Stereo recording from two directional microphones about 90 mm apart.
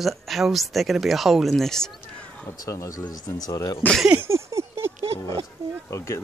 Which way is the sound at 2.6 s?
40° left (ahead or behind).